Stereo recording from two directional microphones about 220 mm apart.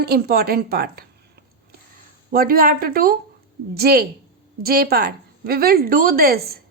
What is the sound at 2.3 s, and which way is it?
A woman's voice, 40° right (ahead or behind).